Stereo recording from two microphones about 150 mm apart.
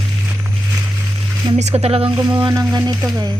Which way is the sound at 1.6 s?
45° right (ahead or behind).